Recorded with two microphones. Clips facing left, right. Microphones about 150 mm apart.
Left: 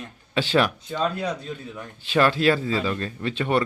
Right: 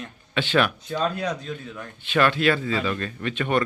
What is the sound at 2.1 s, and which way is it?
Speech, 35° left (ahead or behind).